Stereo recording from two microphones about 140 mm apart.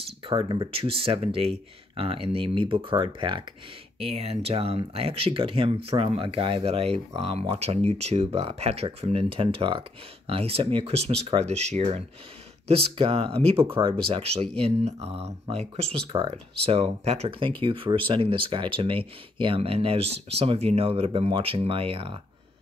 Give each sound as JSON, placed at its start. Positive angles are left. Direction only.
{"t": 0.3, "sound": "speech", "side_deg": -35}
{"t": 4.0, "sound": "speech", "side_deg": -45}